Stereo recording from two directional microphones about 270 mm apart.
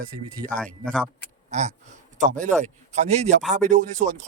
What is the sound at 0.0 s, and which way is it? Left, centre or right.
Speech, right.